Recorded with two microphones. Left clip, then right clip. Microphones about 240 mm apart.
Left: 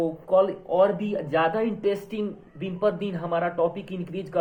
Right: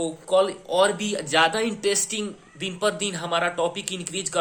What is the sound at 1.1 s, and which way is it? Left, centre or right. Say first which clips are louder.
Speech: right 3 dB; right.